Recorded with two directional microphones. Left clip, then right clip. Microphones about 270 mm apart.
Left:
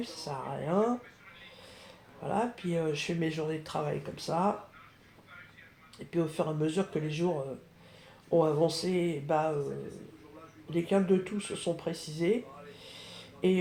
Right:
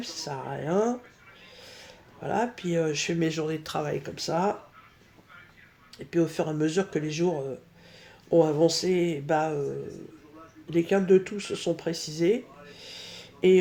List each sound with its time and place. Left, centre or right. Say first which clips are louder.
0.0 s speech: right 3 dB; right
6.1 s speech: right 5 dB; right
10.7 s speech: right 6 dB; right
12.8 s a sound: right 5 dB; right